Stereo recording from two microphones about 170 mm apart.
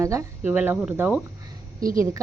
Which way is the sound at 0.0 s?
15° right (ahead or behind).